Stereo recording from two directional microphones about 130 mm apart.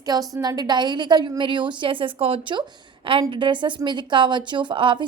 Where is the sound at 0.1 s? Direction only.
30° right (ahead or behind).